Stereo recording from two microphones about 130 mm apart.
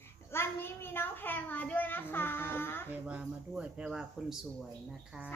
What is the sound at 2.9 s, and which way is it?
Speech, 10° right (ahead or behind).